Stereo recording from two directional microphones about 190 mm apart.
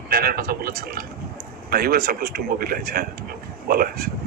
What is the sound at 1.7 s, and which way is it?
Speech, 50° right (ahead or behind).